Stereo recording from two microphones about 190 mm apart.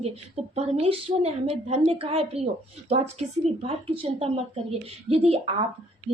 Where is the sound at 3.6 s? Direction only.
30° right (ahead or behind).